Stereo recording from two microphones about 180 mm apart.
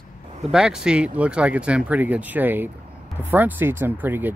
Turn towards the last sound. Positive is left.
turn(degrees=-10)  # may be behind; listen again after turning